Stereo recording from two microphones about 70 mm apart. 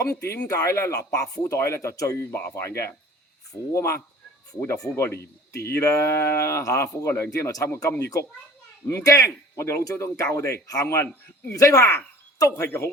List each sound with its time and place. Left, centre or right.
0.1 s speech: left
0.3 s speech: left
1.6 s speech: left
4.9 s speech: left
9.0 s speech: left
10.7 s speech: left
10.9 s speech: left
11.5 s speech: left
12.6 s speech: left